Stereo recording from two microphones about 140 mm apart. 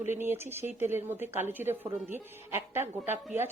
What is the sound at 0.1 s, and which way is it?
Speech, 15° right (ahead or behind).